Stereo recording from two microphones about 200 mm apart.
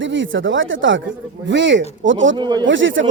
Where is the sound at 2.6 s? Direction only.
70° right (ahead or behind).